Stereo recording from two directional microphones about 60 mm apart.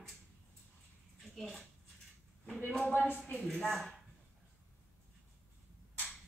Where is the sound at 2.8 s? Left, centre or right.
Left.